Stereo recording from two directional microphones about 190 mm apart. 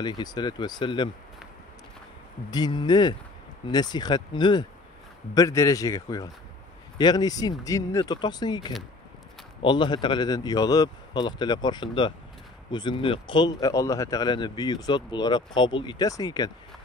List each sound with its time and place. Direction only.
0.0 s speech: 20° left (ahead or behind)
2.5 s a man's voice: 20° left (ahead or behind)